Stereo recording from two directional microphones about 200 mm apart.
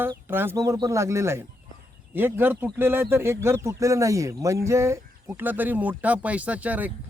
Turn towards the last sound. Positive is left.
turn(degrees=-5)  # may be behind; listen again after turning